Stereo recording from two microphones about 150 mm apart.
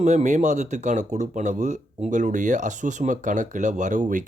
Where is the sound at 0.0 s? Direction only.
50° right (ahead or behind).